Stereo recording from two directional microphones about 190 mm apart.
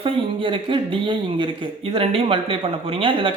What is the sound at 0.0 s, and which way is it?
Speech, 25° right (ahead or behind).